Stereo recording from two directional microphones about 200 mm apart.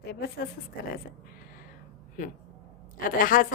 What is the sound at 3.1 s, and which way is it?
Speech, 45° left (ahead or behind).